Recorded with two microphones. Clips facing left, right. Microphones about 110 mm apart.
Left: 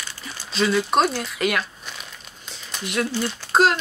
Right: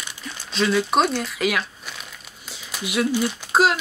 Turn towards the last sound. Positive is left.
turn(degrees=0)  # may be behind; listen again after turning